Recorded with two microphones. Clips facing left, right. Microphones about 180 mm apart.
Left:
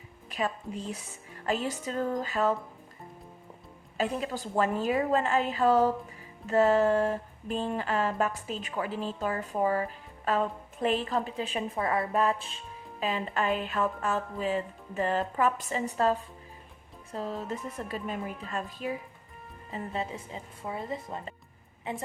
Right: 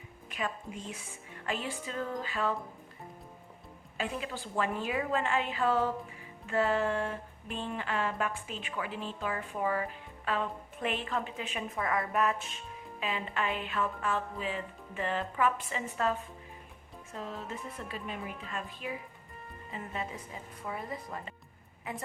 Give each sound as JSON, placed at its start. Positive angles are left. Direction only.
{"t": 0.3, "sound": "a woman's voice", "side_deg": 35}
{"t": 1.5, "sound": "music", "side_deg": 40}
{"t": 3.9, "sound": "music", "side_deg": 40}
{"t": 19.7, "sound": "speech", "side_deg": 30}